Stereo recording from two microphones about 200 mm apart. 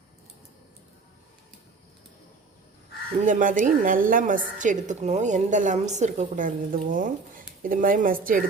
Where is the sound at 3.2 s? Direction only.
40° right (ahead or behind).